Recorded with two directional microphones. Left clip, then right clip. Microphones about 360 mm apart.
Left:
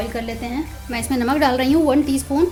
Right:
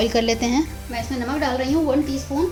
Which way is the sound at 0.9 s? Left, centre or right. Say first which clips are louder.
Left 5 dB; left.